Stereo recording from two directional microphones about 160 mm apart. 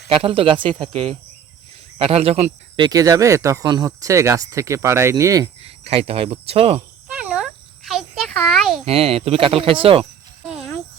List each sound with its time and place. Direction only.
0.1 s speech: 35° right (ahead or behind)
0.8 s speech: 5° left (ahead or behind)
2.0 s speech: 40° right (ahead or behind); by 5.5 s 20° right (ahead or behind)
5.6 s speech: 40° right (ahead or behind)
7.1 s a sound: 10° right (ahead or behind)
8.8 s speech: 35° right (ahead or behind)
10.5 s a sound: 5° right (ahead or behind)